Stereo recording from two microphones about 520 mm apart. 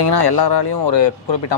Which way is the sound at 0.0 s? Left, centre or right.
Left.